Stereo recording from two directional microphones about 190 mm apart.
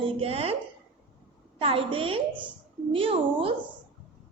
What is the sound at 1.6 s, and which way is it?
A woman's voice, 30° right (ahead or behind).